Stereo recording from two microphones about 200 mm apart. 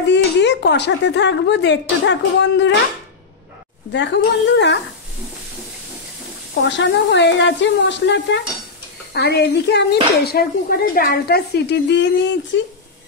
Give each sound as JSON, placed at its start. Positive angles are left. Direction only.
{"t": 0.1, "sound": "speech", "side_deg": 60}
{"t": 3.9, "sound": "speech", "side_deg": 60}
{"t": 6.6, "sound": "speech", "side_deg": 65}